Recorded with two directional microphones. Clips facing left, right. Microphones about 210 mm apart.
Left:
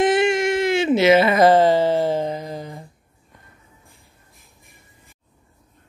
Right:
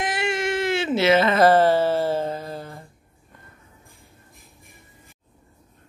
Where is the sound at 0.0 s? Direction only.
20° left (ahead or behind).